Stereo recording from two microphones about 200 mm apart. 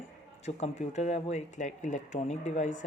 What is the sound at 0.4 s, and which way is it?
Speech, 35° left (ahead or behind).